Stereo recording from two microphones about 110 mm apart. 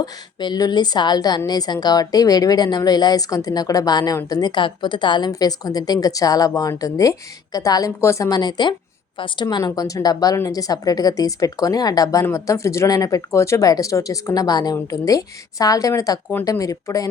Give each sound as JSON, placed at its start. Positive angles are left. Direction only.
{"t": 0.0, "sound": "a woman's voice", "side_deg": 40}